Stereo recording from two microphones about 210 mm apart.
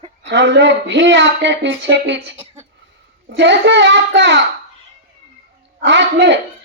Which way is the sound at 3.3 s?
55° right (ahead or behind).